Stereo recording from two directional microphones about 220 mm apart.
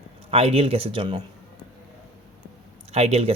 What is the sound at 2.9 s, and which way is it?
Speech, 30° right (ahead or behind).